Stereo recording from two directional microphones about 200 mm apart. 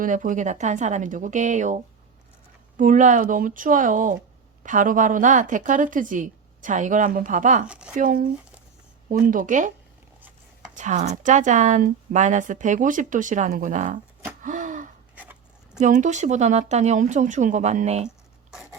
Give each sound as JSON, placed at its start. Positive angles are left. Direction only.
{"t": 0.0, "sound": "speech", "side_deg": -40}
{"t": 7.7, "sound": "speech", "side_deg": -5}
{"t": 7.9, "sound": "speech", "side_deg": -45}
{"t": 10.8, "sound": "speech", "side_deg": -35}
{"t": 14.4, "sound": "gasp", "side_deg": -40}
{"t": 15.1, "sound": "a sound", "side_deg": -5}
{"t": 15.8, "sound": "speech", "side_deg": -35}